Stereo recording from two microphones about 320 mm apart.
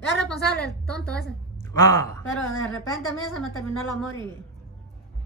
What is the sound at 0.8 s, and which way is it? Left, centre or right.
A woman's voice, centre.